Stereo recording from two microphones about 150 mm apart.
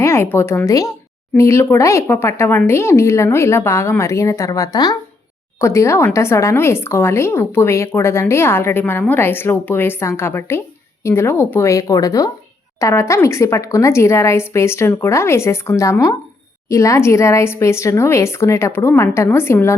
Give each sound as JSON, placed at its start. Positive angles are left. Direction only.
{"t": 0.0, "sound": "a woman's voice", "side_deg": 15}